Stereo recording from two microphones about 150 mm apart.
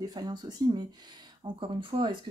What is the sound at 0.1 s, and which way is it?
Speech, 30° right (ahead or behind).